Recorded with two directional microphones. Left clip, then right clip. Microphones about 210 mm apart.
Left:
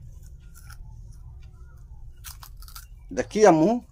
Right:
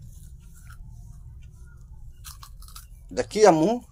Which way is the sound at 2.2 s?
20° left (ahead or behind).